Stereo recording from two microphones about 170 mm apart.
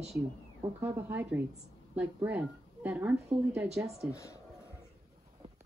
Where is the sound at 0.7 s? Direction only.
15° right (ahead or behind).